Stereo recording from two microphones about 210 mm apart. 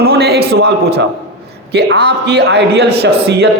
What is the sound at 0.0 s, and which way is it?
A man's voice, 50° right (ahead or behind).